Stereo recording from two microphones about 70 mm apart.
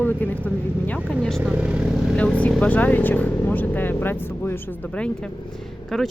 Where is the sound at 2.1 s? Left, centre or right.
Centre.